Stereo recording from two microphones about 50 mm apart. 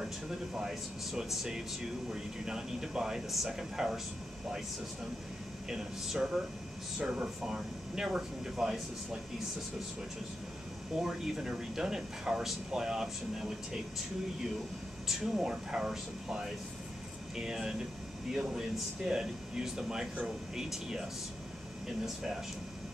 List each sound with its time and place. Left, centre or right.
0.6 s speech: centre
5.7 s speech: centre
11.0 s speech: centre
15.0 s speech: centre